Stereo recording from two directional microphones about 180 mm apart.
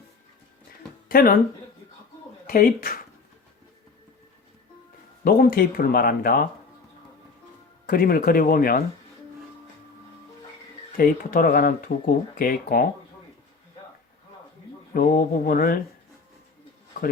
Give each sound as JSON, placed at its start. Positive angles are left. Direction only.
{"t": 1.0, "sound": "speech", "side_deg": 55}
{"t": 2.5, "sound": "speech", "side_deg": 55}
{"t": 5.2, "sound": "speech", "side_deg": 55}
{"t": 7.9, "sound": "speech", "side_deg": 55}
{"t": 10.9, "sound": "speech", "side_deg": 55}
{"t": 14.9, "sound": "speech", "side_deg": 50}